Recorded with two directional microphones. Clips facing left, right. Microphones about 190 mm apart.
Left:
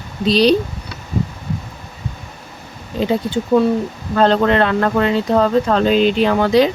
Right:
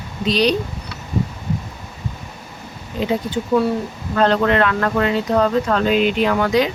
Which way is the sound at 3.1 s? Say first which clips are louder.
Left 3 dB; 30° left (ahead or behind).